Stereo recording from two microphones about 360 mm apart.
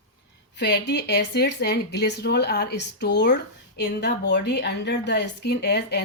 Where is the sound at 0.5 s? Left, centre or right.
Left.